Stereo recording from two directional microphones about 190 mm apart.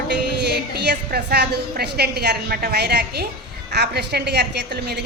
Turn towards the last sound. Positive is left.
turn(degrees=-60)  # may be behind; listen again after turning